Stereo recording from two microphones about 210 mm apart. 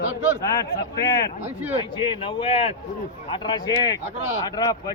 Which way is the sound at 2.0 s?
25° left (ahead or behind).